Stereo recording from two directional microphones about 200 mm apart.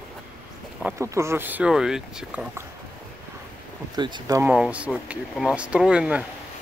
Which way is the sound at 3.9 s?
20° right (ahead or behind).